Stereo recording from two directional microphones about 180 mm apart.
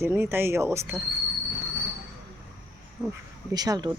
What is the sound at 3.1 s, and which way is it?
Speech, 20° right (ahead or behind).